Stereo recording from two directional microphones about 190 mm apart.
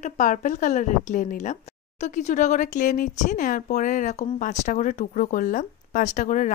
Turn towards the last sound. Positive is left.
turn(degrees=40)  # may be behind; listen again after turning